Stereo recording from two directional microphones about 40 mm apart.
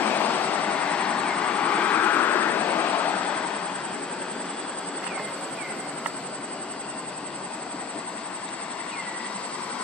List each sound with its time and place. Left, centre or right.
0.0 s vehicle: left
0.7 s vehicle: left